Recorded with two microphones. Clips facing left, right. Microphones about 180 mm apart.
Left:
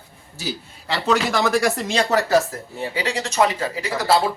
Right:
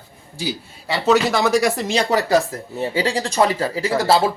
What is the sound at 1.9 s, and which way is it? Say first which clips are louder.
Speech: right 1 dB; 15° right (ahead or behind).